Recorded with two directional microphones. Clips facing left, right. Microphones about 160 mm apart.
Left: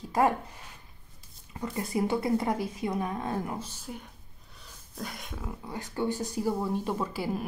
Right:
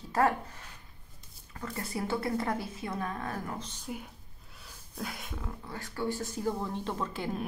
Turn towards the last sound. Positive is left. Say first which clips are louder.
# left 3 dB
turn(degrees=10)  # may be behind; listen again after turning